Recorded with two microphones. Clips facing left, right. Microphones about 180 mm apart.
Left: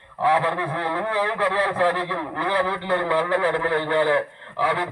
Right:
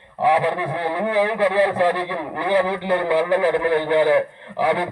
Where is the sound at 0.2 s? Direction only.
15° right (ahead or behind).